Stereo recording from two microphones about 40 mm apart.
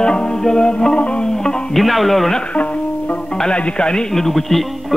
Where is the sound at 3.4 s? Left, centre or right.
Left.